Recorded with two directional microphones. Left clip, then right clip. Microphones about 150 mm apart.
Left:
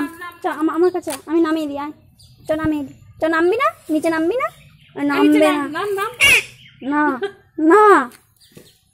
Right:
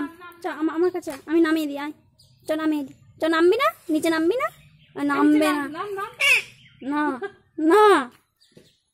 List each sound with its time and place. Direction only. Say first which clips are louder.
0.4 s a woman's voice: left 6 dB; 5° right (ahead or behind)
1.0 s a woman's voice: left 3 dB; 25° right (ahead or behind)
4.5 s a child's voice: left 3 dB; 15° right (ahead or behind)